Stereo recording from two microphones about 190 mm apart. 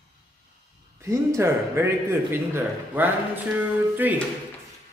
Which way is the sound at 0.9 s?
15° right (ahead or behind).